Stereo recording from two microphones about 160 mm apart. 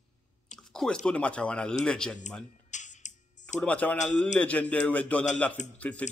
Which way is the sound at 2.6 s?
50° left (ahead or behind).